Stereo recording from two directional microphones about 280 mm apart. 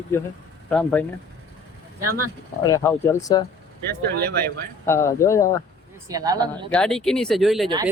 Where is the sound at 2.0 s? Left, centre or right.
Right.